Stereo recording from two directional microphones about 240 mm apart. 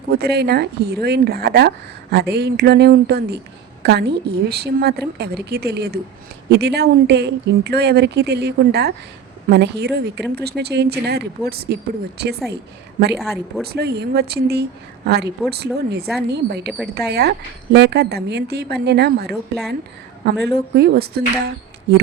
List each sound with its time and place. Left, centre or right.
0.1 s speech: right
13.7 s speech: right